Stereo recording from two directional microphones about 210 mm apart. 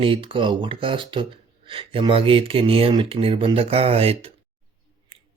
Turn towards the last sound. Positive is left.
turn(degrees=-30)  # may be behind; listen again after turning